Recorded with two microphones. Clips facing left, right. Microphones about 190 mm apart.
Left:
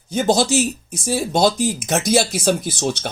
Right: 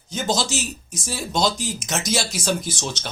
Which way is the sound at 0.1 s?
55° left (ahead or behind).